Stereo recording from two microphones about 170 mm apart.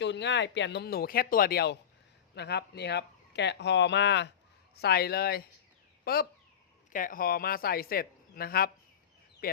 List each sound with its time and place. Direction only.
0.0 s speech: 90° left
4.7 s speech: 70° left (ahead or behind)
6.9 s speech: 55° left (ahead or behind)
9.4 s a sound: 60° left (ahead or behind)